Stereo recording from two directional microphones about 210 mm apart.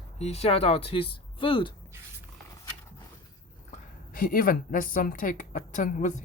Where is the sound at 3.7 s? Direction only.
40° left (ahead or behind).